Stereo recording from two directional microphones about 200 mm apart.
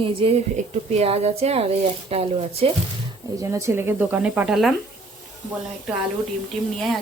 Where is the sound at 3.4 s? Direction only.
15° right (ahead or behind).